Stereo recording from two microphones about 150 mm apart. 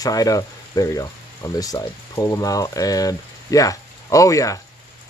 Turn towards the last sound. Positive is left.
turn(degrees=20)  # may be behind; listen again after turning